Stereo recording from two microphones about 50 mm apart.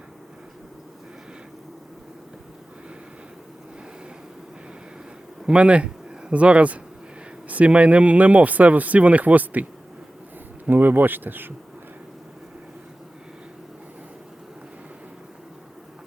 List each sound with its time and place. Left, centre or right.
5.5 s speech: right
10.7 s speech: right